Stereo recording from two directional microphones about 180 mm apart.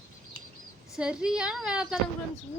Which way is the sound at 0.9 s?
5° right (ahead or behind).